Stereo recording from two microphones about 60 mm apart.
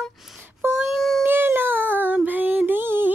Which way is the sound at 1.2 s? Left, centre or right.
Right.